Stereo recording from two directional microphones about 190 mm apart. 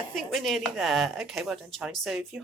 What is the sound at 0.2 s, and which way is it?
Speech, centre (ahead or behind).